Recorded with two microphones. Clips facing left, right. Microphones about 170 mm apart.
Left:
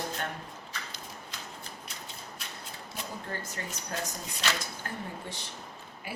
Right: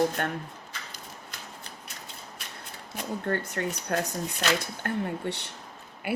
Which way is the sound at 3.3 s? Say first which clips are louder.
Right 9 dB; 65° right (ahead or behind).